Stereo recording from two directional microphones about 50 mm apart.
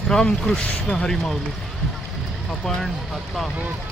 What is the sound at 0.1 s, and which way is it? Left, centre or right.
Speech, centre.